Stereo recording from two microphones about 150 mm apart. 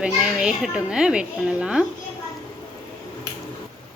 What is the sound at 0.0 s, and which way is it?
A child's voice, 5° right (ahead or behind).